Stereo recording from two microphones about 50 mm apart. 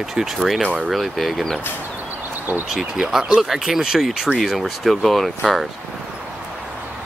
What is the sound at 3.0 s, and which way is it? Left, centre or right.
Speech, centre.